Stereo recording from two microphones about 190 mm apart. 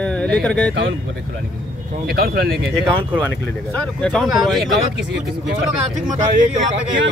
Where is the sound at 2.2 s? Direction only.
55° right (ahead or behind).